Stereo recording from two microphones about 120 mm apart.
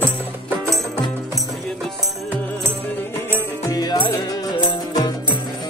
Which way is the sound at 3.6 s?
35° left (ahead or behind).